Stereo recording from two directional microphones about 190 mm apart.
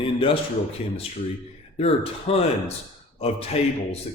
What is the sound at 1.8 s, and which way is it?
Speech, 35° left (ahead or behind).